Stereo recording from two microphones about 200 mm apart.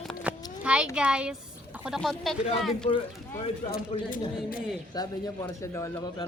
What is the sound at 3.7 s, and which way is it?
Speech, 45° left (ahead or behind).